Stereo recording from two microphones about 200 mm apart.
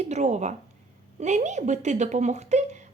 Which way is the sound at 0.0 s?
35° right (ahead or behind).